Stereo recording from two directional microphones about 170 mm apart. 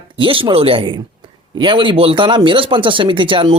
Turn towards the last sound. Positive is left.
turn(degrees=-30)  # may be behind; listen again after turning